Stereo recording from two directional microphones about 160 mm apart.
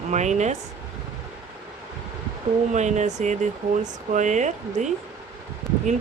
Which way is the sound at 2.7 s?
45° right (ahead or behind).